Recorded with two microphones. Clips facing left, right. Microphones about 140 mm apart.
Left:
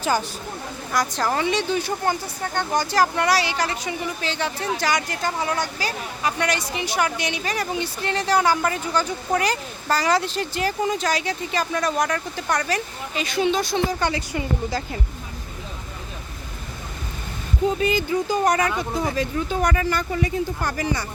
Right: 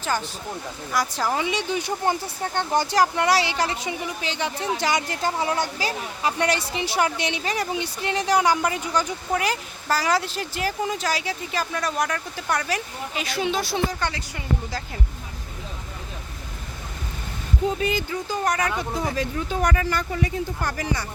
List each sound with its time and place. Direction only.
0.0 s speech: 10° left (ahead or behind)
0.9 s speech: 5° right (ahead or behind)
14.0 s speech: 10° left (ahead or behind)
17.7 s speech: 10° left (ahead or behind)
19.1 s speech: 5° left (ahead or behind)